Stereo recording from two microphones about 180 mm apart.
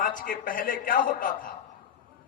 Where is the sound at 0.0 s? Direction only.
50° left (ahead or behind).